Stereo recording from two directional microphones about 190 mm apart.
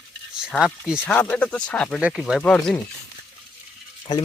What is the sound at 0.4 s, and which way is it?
Speech, 5° right (ahead or behind).